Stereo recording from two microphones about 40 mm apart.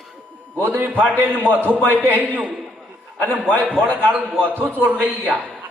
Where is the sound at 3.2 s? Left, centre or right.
Left.